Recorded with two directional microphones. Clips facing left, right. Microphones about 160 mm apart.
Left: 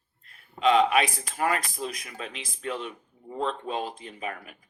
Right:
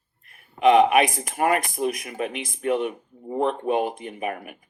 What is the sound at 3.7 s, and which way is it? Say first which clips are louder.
Speech: right 8 dB; 55° right (ahead or behind).